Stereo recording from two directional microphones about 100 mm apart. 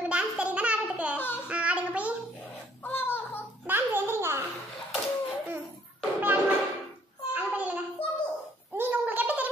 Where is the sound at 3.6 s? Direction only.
20° right (ahead or behind).